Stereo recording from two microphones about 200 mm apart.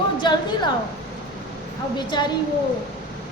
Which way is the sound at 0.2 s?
20° left (ahead or behind).